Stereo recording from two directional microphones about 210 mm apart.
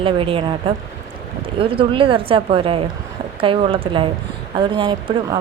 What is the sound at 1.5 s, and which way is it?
Speech, 25° right (ahead or behind).